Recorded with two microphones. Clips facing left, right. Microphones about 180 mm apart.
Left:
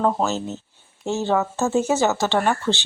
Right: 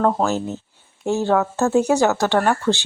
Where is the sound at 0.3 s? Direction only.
15° right (ahead or behind).